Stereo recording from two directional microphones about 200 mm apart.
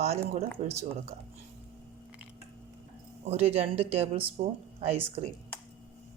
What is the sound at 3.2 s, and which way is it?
Speech, 30° right (ahead or behind).